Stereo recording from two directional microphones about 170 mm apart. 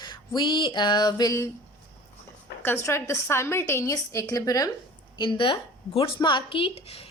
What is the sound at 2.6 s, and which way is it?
A woman's voice, 15° left (ahead or behind).